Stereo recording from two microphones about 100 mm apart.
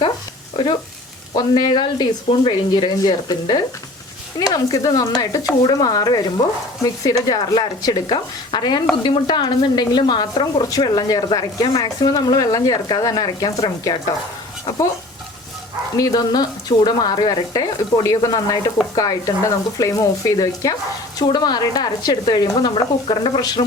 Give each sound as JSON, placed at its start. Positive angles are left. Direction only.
{"t": 0.5, "sound": "speech", "side_deg": 55}
{"t": 16.0, "sound": "speech", "side_deg": 45}
{"t": 21.2, "sound": "speech", "side_deg": 45}
{"t": 23.4, "sound": "speech", "side_deg": 40}